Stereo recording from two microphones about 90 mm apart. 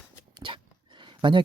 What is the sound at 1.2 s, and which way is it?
Speech, 65° right (ahead or behind).